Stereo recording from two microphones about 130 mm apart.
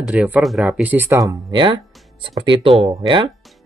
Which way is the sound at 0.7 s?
15° right (ahead or behind).